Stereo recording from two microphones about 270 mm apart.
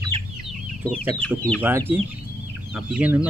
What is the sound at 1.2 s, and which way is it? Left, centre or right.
Speech, centre.